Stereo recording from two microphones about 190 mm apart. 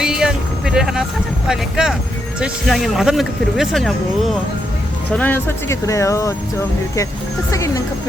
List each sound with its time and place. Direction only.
0.0 s vehicle: 5° right (ahead or behind)
1.5 s speech: 5° right (ahead or behind); by 6.3 s 15° left (ahead or behind)